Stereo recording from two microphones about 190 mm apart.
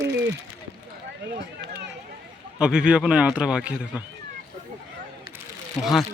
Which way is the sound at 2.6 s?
5° right (ahead or behind).